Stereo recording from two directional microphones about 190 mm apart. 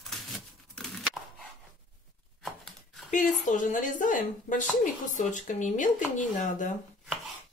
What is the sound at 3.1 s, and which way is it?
Speech, 40° left (ahead or behind).